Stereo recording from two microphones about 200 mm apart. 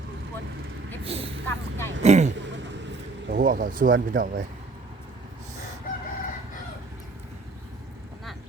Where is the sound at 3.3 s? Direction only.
45° right (ahead or behind).